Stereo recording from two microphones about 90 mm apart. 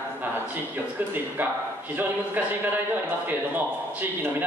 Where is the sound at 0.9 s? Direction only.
20° right (ahead or behind).